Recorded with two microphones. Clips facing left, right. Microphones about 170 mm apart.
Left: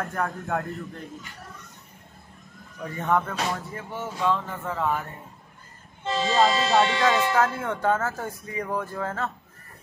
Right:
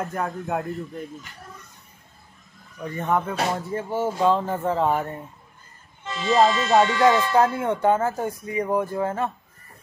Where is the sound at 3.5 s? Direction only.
30° right (ahead or behind).